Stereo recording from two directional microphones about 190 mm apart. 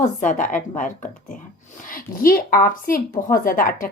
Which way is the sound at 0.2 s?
45° left (ahead or behind).